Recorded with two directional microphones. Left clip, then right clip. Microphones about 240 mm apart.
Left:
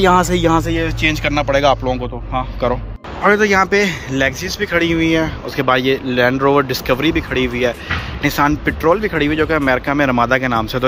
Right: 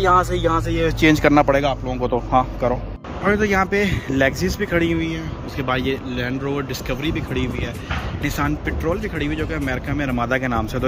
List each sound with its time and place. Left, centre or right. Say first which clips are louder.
0.0 s speech: left 4 dB; left
0.8 s speech: right 2 dB; right
1.6 s speech: left 7 dB; centre